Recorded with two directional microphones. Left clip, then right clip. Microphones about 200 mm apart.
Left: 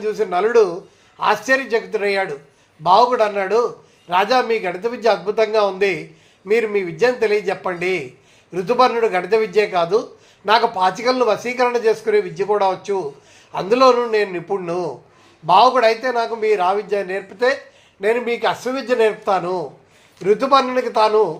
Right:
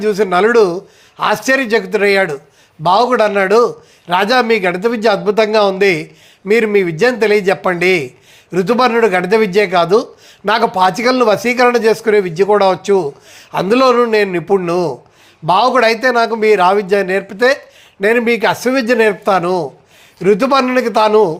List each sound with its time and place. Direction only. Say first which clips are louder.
0.0 s speech: right 7 dB; 50° right (ahead or behind)